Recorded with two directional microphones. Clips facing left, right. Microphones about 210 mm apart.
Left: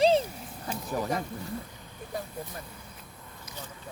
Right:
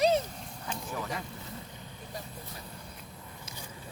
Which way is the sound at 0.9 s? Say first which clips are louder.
Left 8 dB; 40° left (ahead or behind).